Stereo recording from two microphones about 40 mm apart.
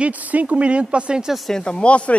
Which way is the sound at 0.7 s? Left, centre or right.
Right.